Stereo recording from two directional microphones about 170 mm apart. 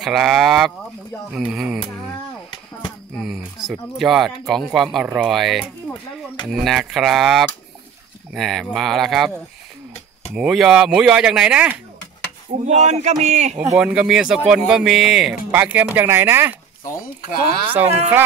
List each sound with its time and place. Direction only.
0.0 s speech: centre (ahead or behind)
3.2 s speech: centre (ahead or behind)
10.3 s speech: 5° right (ahead or behind)
12.6 s speech: 40° right (ahead or behind)
13.7 s speech: 5° right (ahead or behind)
17.8 s speech: 40° right (ahead or behind)